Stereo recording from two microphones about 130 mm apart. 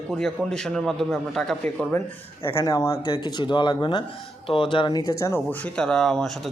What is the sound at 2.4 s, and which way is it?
Speech, 25° left (ahead or behind).